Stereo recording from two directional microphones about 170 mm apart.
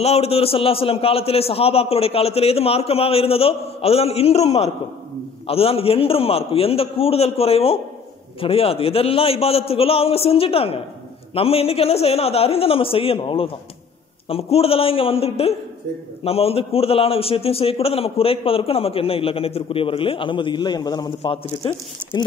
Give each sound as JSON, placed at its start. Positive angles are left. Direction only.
{"t": 0.0, "sound": "a man's voice", "side_deg": 35}